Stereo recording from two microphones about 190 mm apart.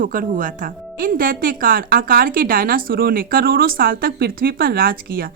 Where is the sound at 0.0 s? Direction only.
45° right (ahead or behind).